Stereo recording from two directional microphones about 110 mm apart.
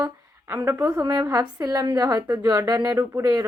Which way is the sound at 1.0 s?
35° right (ahead or behind).